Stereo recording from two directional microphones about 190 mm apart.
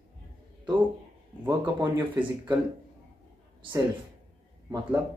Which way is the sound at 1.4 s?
20° right (ahead or behind).